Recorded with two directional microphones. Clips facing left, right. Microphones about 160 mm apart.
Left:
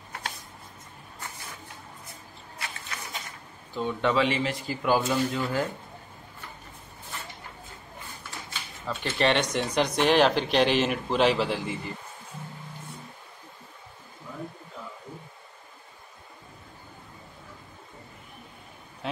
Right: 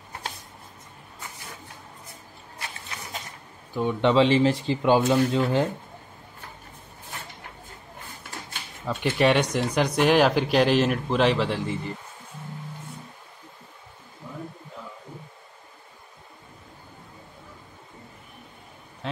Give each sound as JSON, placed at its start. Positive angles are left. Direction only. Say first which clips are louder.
{"t": 3.7, "sound": "speech", "louder": "right 5 dB", "side_deg": -20}
{"t": 8.8, "sound": "speech", "louder": "right 4 dB", "side_deg": -10}